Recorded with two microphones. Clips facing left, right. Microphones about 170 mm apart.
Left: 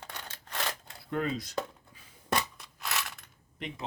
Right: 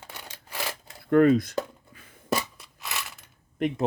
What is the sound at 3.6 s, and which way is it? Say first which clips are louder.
Speech: right 14 dB; 50° right (ahead or behind).